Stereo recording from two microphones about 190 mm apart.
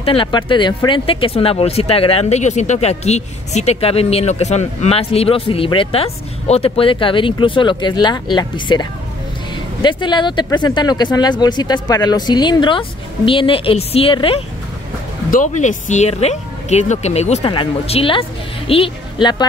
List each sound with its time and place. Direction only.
0.0 s speech: 30° left (ahead or behind)
15.3 s speech: 40° left (ahead or behind); by 19.4 s 25° left (ahead or behind)